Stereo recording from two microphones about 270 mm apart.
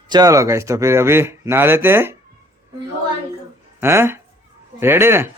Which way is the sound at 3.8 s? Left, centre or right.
Centre.